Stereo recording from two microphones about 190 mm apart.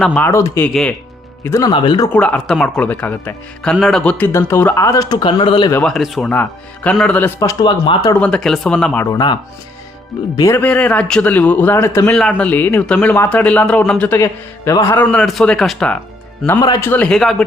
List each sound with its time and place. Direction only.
0.0 s speech: 5° left (ahead or behind)
0.7 s speech: centre (ahead or behind)
1.5 s speech: 15° left (ahead or behind)
1.7 s speech: 25° left (ahead or behind)
2.1 s speech: 5° left (ahead or behind); by 5.7 s 25° left (ahead or behind)
5.7 s speech: centre (ahead or behind)
7.3 s speech: 20° left (ahead or behind)
8.2 s speech: 5° left (ahead or behind)
9.1 s speech: 25° left (ahead or behind)
15.1 s speech: centre (ahead or behind)
16.5 s speech: 20° left (ahead or behind)
16.9 s speech: 5° left (ahead or behind)